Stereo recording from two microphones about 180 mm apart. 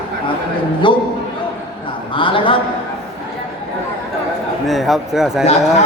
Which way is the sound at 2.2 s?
30° left (ahead or behind).